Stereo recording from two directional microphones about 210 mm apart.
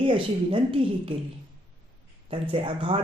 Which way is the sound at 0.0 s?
25° right (ahead or behind).